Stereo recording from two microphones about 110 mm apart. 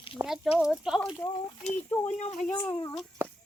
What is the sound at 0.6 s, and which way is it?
Speech, 5° right (ahead or behind).